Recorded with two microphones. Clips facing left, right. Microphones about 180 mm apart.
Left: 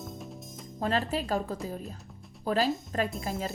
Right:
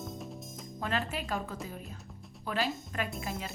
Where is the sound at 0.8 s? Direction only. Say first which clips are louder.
Left 5 dB; 35° left (ahead or behind).